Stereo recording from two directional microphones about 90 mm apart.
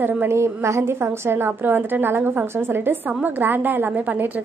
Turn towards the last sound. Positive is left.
turn(degrees=-15)  # may be behind; listen again after turning